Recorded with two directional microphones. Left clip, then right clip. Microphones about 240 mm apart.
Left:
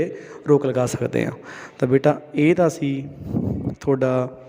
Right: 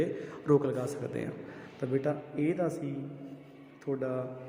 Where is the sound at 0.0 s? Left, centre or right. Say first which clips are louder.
Left 7 dB; left.